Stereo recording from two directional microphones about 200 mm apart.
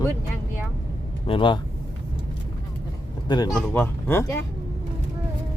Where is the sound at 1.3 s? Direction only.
25° left (ahead or behind).